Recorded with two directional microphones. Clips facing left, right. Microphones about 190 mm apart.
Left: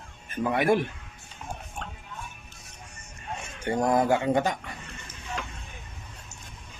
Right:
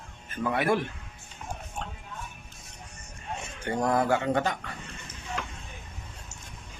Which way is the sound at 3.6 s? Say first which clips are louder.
Left 2 dB; 15° left (ahead or behind).